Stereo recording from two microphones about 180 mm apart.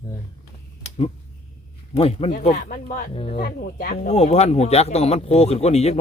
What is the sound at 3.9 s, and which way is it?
Speech, 40° left (ahead or behind).